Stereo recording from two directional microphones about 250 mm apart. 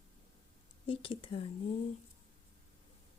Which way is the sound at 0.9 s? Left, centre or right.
Left.